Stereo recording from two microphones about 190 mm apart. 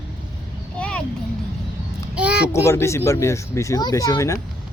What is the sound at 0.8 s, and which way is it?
Vehicle, 5° left (ahead or behind).